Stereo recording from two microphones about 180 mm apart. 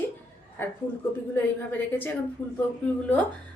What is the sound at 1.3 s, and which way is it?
Speech, 10° left (ahead or behind).